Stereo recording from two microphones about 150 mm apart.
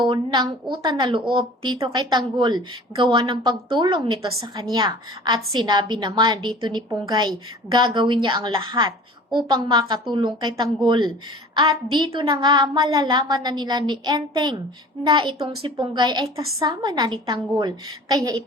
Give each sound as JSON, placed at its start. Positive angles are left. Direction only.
{"t": 0.0, "sound": "a woman's voice", "side_deg": -30}